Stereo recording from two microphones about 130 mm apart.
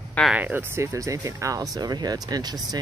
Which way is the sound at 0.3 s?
15° right (ahead or behind).